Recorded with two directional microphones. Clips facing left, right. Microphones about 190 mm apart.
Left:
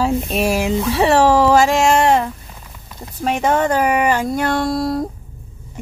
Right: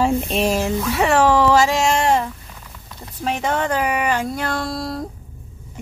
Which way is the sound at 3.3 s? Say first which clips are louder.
Left 5 dB; 50° left (ahead or behind).